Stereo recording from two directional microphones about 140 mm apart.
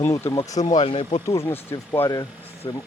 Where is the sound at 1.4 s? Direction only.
20° left (ahead or behind).